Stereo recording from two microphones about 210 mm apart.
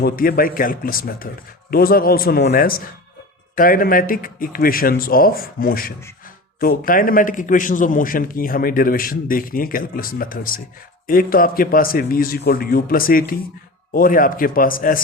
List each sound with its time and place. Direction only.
0.0 s a man's voice: 45° left (ahead or behind)